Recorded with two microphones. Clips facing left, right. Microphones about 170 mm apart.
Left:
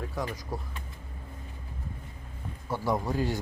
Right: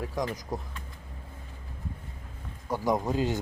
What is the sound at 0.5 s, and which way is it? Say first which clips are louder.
Speech: right 2 dB; 20° right (ahead or behind).